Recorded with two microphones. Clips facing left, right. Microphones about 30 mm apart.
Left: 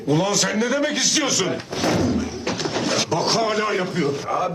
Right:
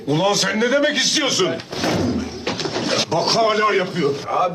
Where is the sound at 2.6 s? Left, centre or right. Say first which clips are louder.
Even; centre.